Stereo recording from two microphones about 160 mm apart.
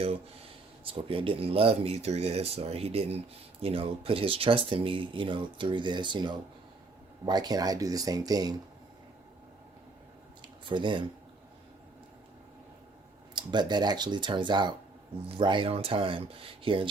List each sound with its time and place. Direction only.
0.9 s speech: 35° right (ahead or behind)
10.4 s a sound: 30° right (ahead or behind)
13.3 s speech: 30° right (ahead or behind)